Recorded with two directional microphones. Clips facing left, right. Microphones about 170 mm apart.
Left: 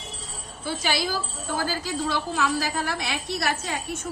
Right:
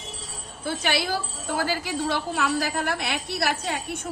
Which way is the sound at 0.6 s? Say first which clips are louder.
Right 1 dB; 60° right (ahead or behind).